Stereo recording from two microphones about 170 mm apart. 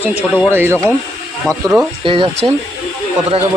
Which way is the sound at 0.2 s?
15° left (ahead or behind).